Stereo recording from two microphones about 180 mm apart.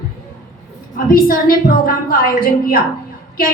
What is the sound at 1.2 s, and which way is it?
Speech, 55° left (ahead or behind).